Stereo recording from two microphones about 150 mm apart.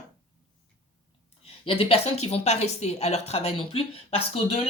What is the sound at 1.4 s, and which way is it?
A woman's voice, 40° left (ahead or behind).